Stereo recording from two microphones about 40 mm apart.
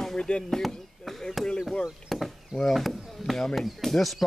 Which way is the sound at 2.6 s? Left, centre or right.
Centre.